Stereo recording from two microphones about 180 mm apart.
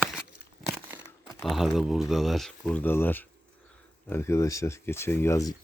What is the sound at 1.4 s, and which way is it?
Speech, centre (ahead or behind).